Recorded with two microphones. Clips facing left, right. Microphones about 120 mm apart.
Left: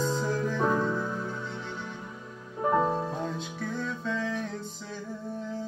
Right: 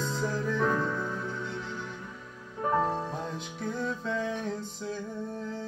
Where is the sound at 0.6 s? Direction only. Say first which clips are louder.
Left 1 dB; 25° left (ahead or behind).